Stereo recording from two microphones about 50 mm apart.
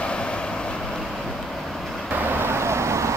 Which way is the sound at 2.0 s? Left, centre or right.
Right.